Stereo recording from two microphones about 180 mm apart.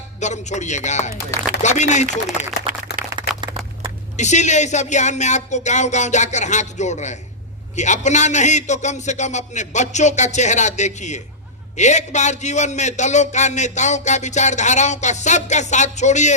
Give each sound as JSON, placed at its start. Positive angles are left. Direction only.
{"t": 0.2, "sound": "speech", "side_deg": 40}
{"t": 3.1, "sound": "a sound", "side_deg": -25}
{"t": 4.2, "sound": "speech", "side_deg": 40}